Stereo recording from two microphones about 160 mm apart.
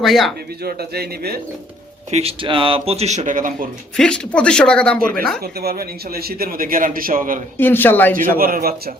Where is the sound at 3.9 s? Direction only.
5° left (ahead or behind).